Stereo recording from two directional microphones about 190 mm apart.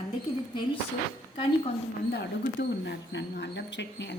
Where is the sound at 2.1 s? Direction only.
65° left (ahead or behind).